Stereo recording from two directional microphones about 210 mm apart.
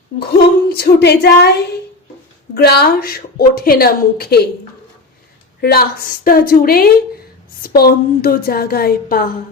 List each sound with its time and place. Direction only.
0.7 s a woman's voice: 50° left (ahead or behind)
2.6 s a woman's voice: 50° left (ahead or behind)
5.5 s a woman's voice: 50° left (ahead or behind)